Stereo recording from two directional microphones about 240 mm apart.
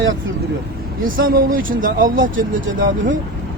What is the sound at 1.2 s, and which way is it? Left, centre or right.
Speech, right.